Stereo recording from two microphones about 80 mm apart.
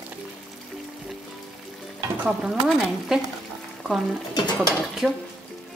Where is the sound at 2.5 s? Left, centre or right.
Centre.